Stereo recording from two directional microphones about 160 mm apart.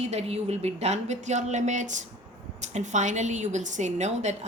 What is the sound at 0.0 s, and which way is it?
Speech, 40° right (ahead or behind).